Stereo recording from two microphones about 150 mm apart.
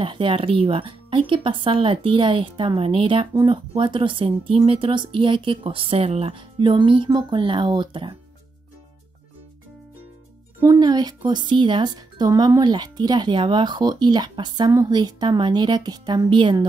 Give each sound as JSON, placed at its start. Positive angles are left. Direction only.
{"t": 0.0, "sound": "speech", "side_deg": -35}
{"t": 10.6, "sound": "speech", "side_deg": -25}